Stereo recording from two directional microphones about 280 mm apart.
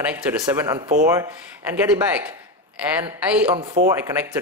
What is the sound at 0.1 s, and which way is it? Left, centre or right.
Speech, centre.